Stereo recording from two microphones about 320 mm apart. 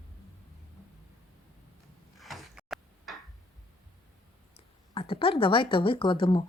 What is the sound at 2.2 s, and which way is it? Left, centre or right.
Door, centre.